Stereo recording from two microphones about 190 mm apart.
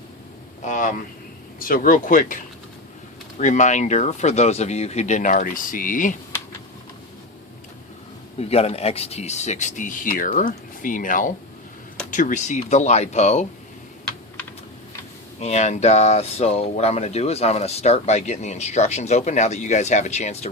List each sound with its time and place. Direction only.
0.6 s speech: 40° left (ahead or behind)
8.4 s speech: 30° left (ahead or behind)
15.4 s speech: 35° left (ahead or behind)